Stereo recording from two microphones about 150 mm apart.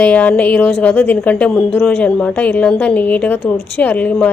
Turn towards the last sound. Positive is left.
turn(degrees=10)  # may be behind; listen again after turning